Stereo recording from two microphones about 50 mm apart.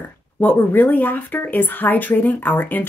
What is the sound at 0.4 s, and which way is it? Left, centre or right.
A woman's voice, left.